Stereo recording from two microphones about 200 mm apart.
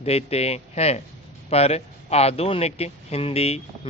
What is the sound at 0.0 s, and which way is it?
Speech, 30° left (ahead or behind).